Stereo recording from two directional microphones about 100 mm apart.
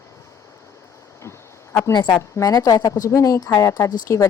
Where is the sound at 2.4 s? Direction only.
35° left (ahead or behind).